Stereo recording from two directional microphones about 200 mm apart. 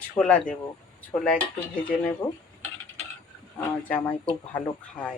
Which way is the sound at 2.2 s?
20° left (ahead or behind).